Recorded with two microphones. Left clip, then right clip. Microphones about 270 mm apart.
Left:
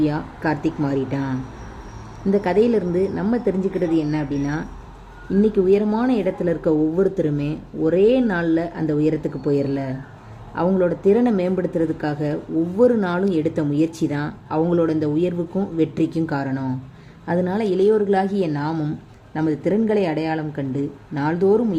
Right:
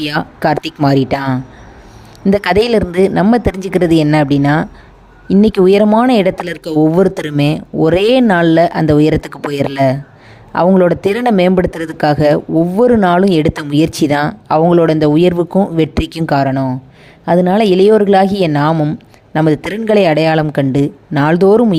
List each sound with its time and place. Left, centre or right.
0.0 s speech: right